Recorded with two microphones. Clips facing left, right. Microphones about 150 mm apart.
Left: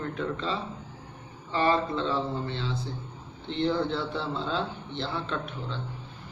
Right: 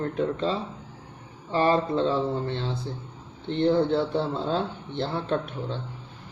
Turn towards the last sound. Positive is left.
turn(degrees=-45)  # may be behind; listen again after turning